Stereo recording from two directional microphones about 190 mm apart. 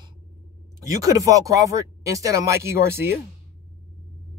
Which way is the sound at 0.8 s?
20° right (ahead or behind).